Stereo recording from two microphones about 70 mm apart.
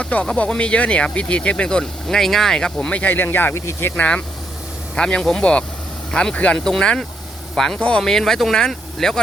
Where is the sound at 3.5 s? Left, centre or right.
Left.